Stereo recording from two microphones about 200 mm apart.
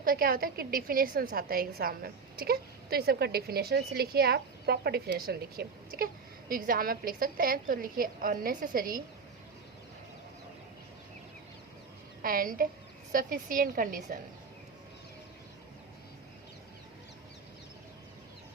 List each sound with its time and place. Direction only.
0.0 s a woman's voice: 45° right (ahead or behind)
12.2 s a woman's voice: 45° right (ahead or behind)